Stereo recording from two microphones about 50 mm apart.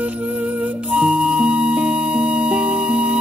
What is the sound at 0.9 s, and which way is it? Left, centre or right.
Music, centre.